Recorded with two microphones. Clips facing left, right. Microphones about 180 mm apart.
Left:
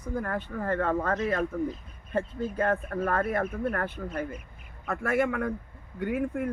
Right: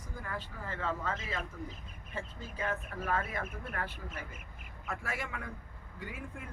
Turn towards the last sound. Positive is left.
turn(degrees=60)  # may be behind; listen again after turning